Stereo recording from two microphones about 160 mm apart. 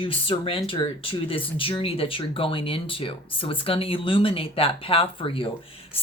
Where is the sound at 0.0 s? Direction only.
35° left (ahead or behind).